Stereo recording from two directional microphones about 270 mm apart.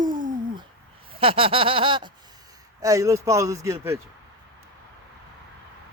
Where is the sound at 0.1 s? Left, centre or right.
Right.